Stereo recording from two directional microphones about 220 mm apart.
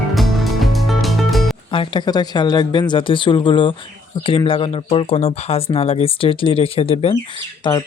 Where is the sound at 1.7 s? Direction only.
20° left (ahead or behind).